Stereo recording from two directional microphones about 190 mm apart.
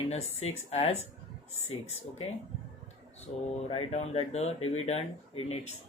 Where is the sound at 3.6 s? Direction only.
35° left (ahead or behind).